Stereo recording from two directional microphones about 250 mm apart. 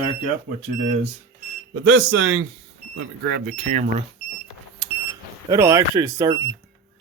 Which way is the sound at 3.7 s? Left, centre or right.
Right.